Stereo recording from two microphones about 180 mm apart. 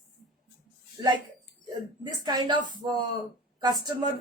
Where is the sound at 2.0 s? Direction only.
25° right (ahead or behind).